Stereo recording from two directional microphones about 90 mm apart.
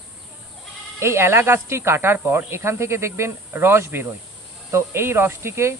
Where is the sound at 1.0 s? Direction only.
30° right (ahead or behind).